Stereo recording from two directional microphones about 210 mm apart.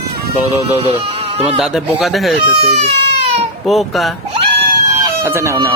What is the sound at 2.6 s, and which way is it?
Speech, 30° right (ahead or behind).